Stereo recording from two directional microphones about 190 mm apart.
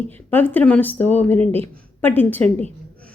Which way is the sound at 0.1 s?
10° left (ahead or behind).